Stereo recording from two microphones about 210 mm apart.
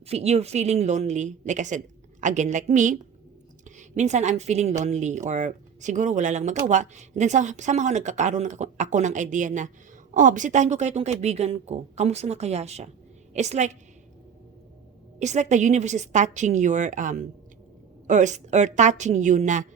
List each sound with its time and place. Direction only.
0.1 s a woman's voice: 30° right (ahead or behind)
15.2 s speech: 35° right (ahead or behind)